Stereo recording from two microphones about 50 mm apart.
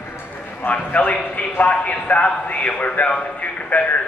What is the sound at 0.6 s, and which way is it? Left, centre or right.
Clip-clop, left.